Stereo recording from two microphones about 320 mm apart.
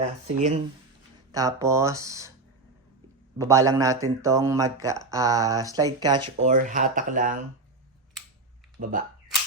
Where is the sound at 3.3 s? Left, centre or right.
Centre.